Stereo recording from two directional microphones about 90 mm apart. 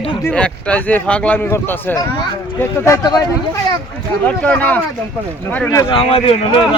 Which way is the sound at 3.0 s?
50° left (ahead or behind).